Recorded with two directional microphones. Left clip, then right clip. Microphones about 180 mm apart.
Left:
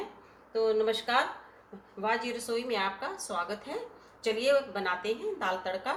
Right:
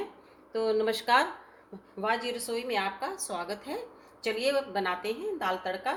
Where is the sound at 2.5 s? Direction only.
45° right (ahead or behind).